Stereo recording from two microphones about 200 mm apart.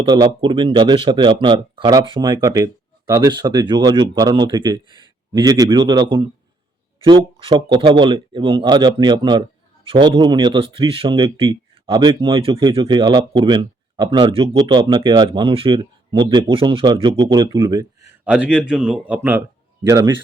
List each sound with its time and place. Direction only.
0.0 s speech: 25° right (ahead or behind)
18.3 s a man's voice: 5° right (ahead or behind)